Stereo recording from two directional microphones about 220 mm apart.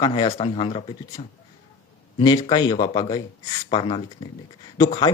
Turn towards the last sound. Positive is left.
turn(degrees=15)  # may be behind; listen again after turning